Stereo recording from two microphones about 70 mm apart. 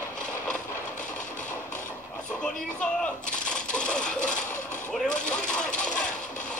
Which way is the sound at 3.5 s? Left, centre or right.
Centre.